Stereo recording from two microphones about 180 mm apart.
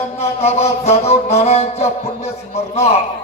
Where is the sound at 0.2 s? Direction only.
35° left (ahead or behind).